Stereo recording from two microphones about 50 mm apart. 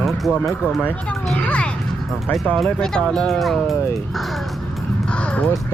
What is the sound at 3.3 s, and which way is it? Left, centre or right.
Speech, centre.